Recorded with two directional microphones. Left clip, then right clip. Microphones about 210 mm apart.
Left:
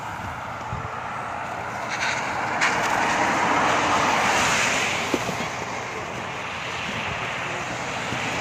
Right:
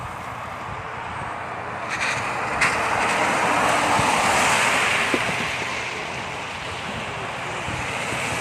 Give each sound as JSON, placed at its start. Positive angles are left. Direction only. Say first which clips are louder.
{"t": 2.0, "sound": "vehicle", "louder": "right 1 dB", "side_deg": -40}